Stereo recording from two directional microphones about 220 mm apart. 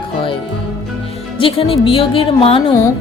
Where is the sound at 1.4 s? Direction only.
25° left (ahead or behind).